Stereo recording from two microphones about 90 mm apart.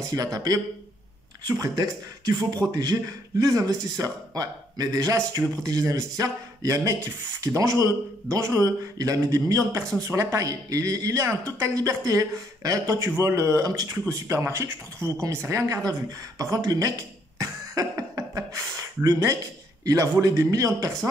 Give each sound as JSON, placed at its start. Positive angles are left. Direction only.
{"t": 0.0, "sound": "speech", "side_deg": -40}